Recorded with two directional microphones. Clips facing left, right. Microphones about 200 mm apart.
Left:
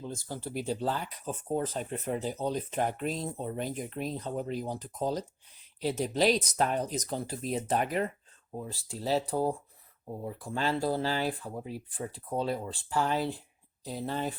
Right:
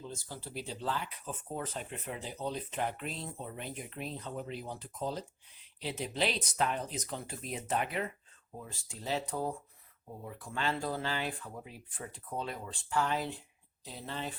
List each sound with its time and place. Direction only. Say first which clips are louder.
0.0 s speech: left 6 dB; 50° left (ahead or behind)